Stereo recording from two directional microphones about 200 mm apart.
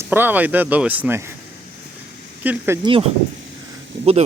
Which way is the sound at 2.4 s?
10° right (ahead or behind).